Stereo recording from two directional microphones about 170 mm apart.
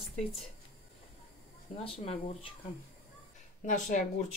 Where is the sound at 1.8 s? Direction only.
35° left (ahead or behind).